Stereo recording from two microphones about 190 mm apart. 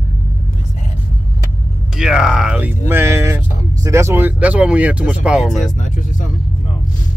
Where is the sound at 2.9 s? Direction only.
15° right (ahead or behind).